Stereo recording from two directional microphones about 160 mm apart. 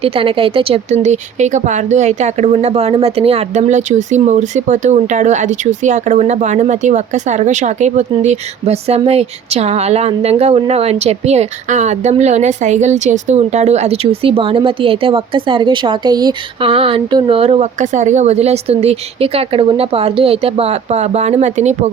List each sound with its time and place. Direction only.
0.0 s speech: 35° right (ahead or behind)